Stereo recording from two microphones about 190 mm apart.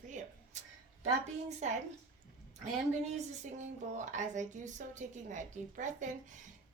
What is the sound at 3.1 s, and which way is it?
A woman's voice, 40° right (ahead or behind).